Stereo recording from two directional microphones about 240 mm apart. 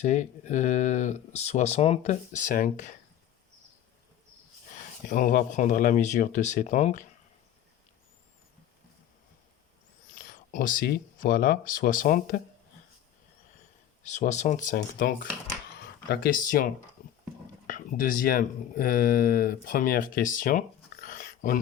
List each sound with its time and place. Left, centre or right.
0.0 s speech: left
4.7 s speech: left
10.2 s speech: left
14.0 s speech: left
17.0 s horse: left
17.7 s speech: left